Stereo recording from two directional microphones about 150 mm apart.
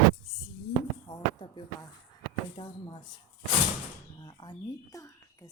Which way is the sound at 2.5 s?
30° left (ahead or behind).